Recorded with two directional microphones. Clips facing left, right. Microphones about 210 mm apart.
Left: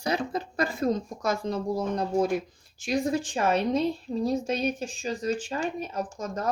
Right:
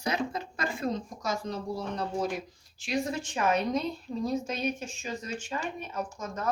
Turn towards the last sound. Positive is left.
turn(degrees=35)  # may be behind; listen again after turning